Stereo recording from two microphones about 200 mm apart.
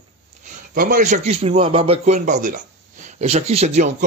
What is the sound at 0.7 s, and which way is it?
A man's voice, 40° right (ahead or behind).